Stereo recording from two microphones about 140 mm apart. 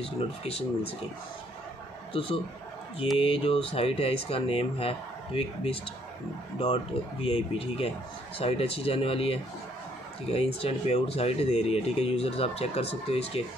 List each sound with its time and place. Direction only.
0.0 s speech: 45° left (ahead or behind)
2.1 s a man's voice: 40° left (ahead or behind)